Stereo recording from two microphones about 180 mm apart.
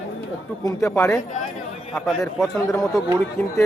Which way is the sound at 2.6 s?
15° left (ahead or behind).